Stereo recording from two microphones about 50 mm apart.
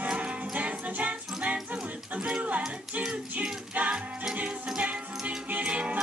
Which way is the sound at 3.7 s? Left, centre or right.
Right.